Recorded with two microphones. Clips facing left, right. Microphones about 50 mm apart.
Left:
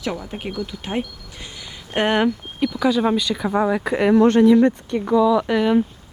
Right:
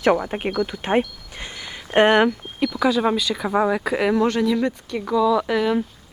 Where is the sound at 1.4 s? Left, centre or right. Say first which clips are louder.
Right 4 dB; right.